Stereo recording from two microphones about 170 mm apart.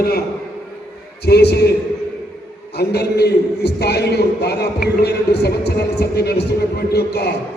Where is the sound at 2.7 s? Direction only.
75° left (ahead or behind).